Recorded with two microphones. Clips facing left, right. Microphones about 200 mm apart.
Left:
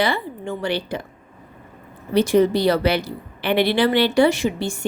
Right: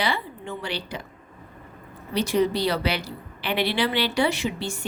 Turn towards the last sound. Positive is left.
turn(degrees=50)  # may be behind; listen again after turning